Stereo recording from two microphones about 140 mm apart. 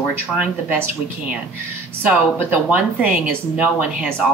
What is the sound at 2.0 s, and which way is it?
Speech, 10° right (ahead or behind).